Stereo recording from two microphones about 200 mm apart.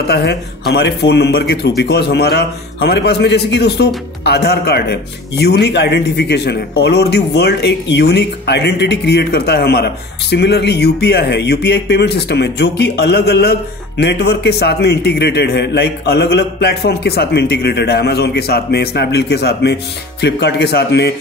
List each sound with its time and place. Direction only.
0.1 s a man's voice: 55° left (ahead or behind)